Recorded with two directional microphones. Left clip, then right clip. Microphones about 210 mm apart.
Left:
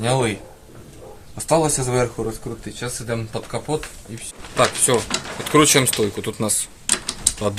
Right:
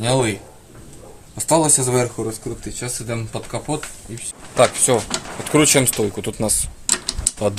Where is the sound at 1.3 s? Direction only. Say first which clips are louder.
Right 2 dB; 30° right (ahead or behind).